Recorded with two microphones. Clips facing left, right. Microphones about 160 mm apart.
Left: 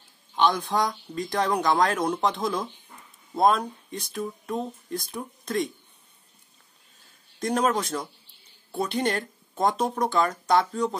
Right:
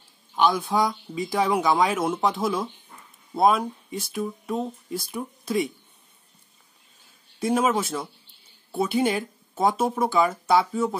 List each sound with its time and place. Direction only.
0.4 s speech: 5° right (ahead or behind)
7.3 s speech: 5° right (ahead or behind)